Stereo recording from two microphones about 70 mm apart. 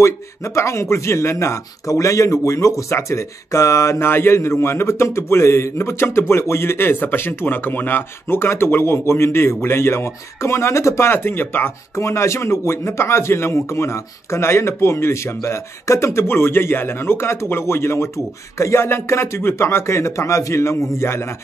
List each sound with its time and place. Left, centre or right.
0.0 s speech: left
11.9 s speech: left